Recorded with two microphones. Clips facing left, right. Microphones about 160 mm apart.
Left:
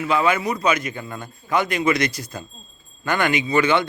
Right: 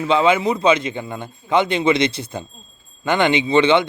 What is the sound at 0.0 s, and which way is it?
A man's voice, 25° right (ahead or behind).